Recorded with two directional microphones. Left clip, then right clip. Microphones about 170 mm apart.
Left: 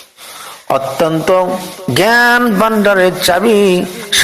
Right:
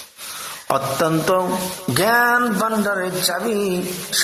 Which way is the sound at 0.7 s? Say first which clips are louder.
Left 6 dB; 15° left (ahead or behind).